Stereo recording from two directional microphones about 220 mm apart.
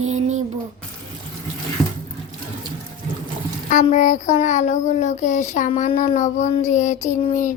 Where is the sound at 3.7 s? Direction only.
35° left (ahead or behind).